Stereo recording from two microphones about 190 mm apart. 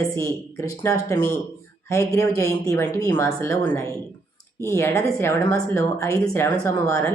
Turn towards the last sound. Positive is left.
turn(degrees=15)  # may be behind; listen again after turning